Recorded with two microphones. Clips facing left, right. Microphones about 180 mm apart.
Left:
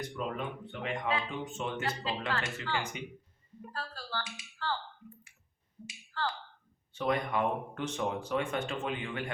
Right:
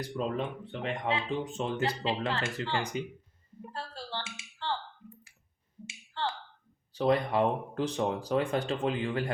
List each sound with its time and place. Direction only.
0.0 s speech: 35° right (ahead or behind)
3.7 s a sound: 25° right (ahead or behind)
5.8 s finger snapping: 25° right (ahead or behind)
6.9 s speech: 35° right (ahead or behind)